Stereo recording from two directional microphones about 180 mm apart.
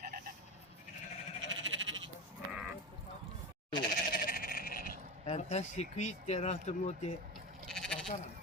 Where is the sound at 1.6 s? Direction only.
90° right.